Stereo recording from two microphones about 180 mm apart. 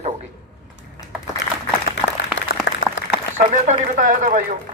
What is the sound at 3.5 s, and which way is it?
Speech, 45° right (ahead or behind).